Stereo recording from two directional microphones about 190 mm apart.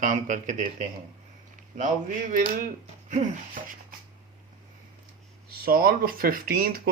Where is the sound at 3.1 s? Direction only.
40° right (ahead or behind).